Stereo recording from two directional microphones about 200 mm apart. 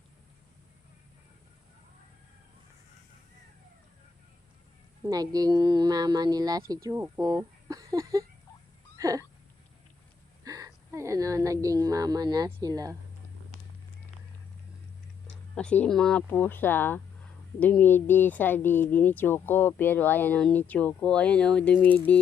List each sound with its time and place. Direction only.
5.0 s speech: 20° right (ahead or behind)
9.0 s a sound: 15° right (ahead or behind)
10.4 s speech: 15° right (ahead or behind)
15.5 s speech: 5° left (ahead or behind)